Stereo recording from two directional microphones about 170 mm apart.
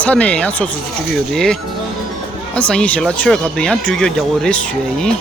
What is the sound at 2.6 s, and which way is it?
Speech, 5° left (ahead or behind).